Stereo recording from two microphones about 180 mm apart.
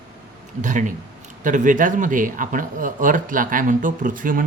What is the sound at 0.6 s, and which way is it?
Speech, 45° right (ahead or behind).